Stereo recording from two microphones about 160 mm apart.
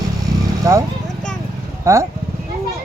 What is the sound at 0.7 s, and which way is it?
Speech, 20° right (ahead or behind).